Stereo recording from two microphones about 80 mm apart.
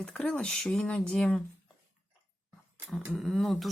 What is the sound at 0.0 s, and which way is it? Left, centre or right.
Speech, centre.